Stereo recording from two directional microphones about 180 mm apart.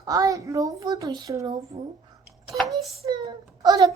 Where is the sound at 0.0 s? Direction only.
20° right (ahead or behind).